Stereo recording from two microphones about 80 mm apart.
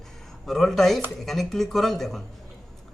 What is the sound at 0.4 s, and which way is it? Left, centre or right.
A man's voice, centre.